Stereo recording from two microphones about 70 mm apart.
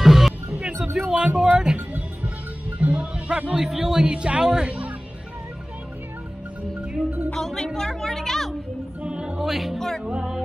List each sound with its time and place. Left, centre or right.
0.0 s music: centre
0.5 s music: centre
1.0 s speech: centre
2.8 s music: centre
3.6 s speech: centre
7.3 s a sound: centre
9.0 s music: centre
10.0 s music: centre